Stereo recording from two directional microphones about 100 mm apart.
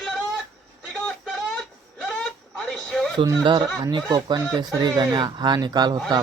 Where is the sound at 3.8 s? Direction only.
45° right (ahead or behind).